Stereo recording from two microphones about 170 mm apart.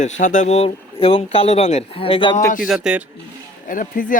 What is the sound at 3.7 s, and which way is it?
Speech, 50° left (ahead or behind).